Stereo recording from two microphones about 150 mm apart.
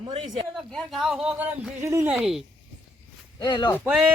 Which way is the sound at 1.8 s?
20° right (ahead or behind).